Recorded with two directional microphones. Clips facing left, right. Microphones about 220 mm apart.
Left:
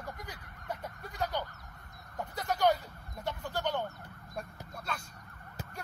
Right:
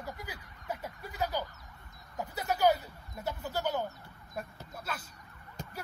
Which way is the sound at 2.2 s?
5° right (ahead or behind).